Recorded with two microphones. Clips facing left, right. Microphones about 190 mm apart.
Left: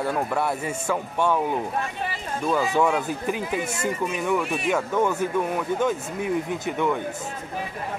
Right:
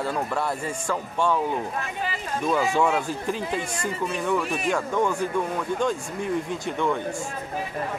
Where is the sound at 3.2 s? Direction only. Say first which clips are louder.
Left 1 dB; 10° left (ahead or behind).